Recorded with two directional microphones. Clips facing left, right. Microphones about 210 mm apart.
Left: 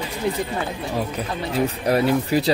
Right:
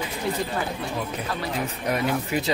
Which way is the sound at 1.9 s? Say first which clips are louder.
Left 5 dB; 35° left (ahead or behind).